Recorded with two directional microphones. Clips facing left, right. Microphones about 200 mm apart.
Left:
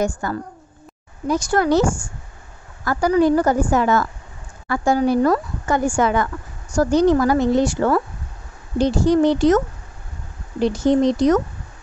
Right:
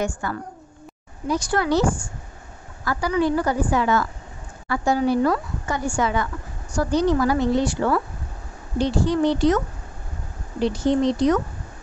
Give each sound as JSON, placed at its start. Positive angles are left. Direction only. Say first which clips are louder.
{"t": 0.0, "sound": "speech", "louder": "left 4 dB", "side_deg": 40}
{"t": 10.6, "sound": "speech", "louder": "left 3 dB", "side_deg": 45}